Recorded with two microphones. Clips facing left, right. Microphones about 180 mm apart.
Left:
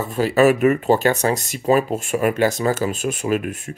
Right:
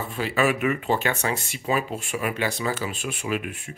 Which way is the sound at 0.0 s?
40° left (ahead or behind).